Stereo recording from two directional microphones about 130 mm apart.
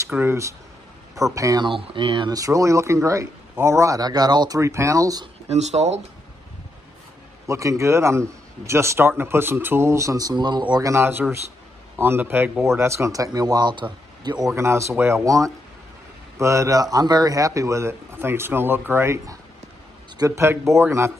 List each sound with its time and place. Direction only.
0.2 s a man's voice: 20° right (ahead or behind)
1.7 s speech: 40° right (ahead or behind)
2.3 s a man's voice: 25° right (ahead or behind)
5.5 s speech: 60° right (ahead or behind)
7.4 s a man's voice: 25° right (ahead or behind)
14.5 s a man's voice: 20° right (ahead or behind)